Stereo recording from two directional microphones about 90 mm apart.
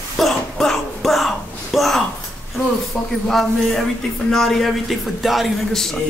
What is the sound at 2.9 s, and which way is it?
Speech, 5° left (ahead or behind).